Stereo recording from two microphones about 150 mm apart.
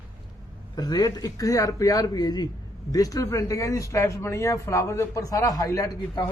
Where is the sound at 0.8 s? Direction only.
25° left (ahead or behind).